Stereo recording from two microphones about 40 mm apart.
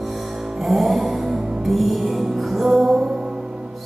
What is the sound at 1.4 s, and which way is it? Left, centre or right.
Music, centre.